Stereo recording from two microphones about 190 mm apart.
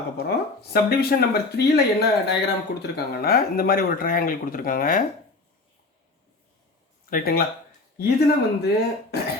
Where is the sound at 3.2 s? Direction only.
50° left (ahead or behind).